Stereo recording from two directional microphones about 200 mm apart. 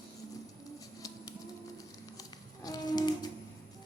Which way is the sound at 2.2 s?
20° left (ahead or behind).